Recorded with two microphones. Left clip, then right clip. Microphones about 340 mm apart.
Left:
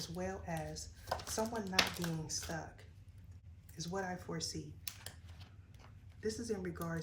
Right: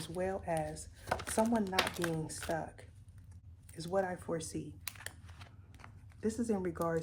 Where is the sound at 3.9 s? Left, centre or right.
Right.